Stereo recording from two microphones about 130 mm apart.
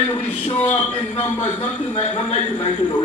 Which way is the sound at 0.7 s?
65° left (ahead or behind).